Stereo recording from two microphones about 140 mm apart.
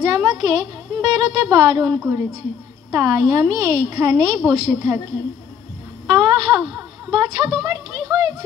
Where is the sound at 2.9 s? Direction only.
25° right (ahead or behind).